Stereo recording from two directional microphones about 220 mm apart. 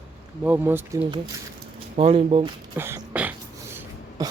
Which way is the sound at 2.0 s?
25° right (ahead or behind).